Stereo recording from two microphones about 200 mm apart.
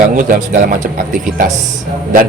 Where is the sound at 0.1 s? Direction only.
40° right (ahead or behind).